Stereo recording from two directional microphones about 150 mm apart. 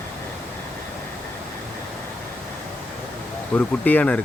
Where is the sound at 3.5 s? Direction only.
10° left (ahead or behind).